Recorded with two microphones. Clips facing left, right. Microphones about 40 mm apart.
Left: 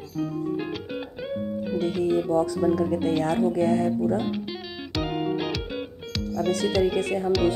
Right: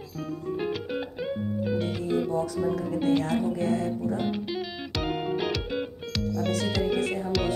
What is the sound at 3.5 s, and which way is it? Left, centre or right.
Speech, left.